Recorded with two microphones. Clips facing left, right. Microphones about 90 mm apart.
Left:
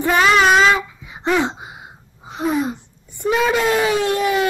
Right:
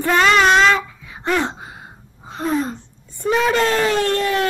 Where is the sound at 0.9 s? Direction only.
20° left (ahead or behind).